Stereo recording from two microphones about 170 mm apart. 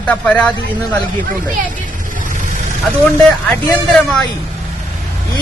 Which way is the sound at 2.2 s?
50° right (ahead or behind).